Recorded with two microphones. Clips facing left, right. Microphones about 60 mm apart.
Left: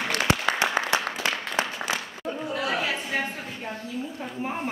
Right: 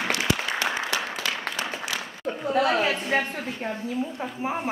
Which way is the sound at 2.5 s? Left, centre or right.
Right.